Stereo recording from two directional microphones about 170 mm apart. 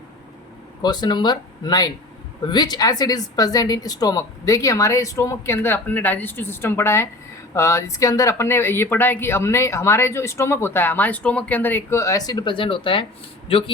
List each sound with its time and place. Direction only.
0.8 s a woman's voice: 25° left (ahead or behind)